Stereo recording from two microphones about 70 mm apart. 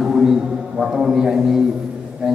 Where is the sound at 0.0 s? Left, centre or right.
Centre.